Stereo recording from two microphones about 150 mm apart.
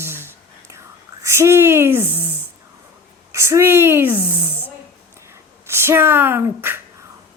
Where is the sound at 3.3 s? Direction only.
20° right (ahead or behind).